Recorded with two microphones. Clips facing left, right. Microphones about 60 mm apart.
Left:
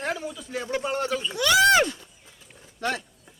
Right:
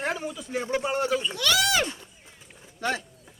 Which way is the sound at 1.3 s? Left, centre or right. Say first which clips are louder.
Left 5 dB; left.